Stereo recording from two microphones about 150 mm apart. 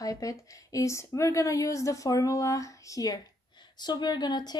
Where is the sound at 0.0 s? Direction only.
20° left (ahead or behind).